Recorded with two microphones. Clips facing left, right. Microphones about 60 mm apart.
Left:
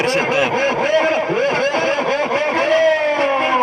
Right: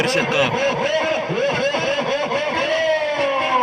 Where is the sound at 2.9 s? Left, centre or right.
Centre.